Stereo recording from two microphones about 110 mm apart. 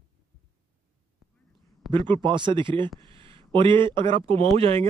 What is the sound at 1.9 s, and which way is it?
Speech, 45° right (ahead or behind).